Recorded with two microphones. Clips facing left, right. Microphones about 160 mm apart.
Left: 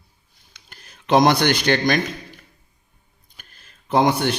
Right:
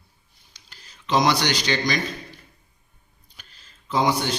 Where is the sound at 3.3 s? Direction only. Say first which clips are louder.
Left 2 dB; 55° left (ahead or behind).